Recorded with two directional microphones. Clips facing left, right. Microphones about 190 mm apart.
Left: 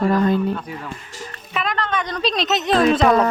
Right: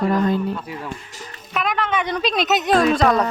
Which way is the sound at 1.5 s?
Centre (ahead or behind).